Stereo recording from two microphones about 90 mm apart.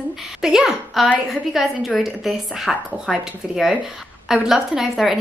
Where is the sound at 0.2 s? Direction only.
5° right (ahead or behind).